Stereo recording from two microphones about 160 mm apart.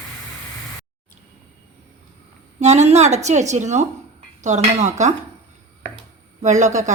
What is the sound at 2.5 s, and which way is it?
A woman's voice, 45° right (ahead or behind).